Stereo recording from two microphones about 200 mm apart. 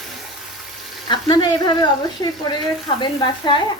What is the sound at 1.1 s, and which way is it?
Speech, 20° left (ahead or behind).